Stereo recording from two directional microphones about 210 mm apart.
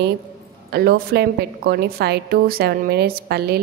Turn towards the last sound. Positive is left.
turn(degrees=-50)  # may be behind; listen again after turning